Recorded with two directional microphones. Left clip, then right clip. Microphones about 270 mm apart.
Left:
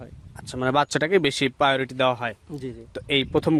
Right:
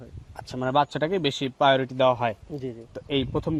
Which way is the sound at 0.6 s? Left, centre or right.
Left.